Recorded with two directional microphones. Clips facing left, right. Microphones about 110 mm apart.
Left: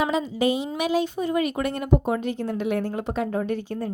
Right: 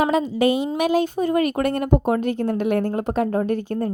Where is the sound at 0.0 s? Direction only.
55° right (ahead or behind).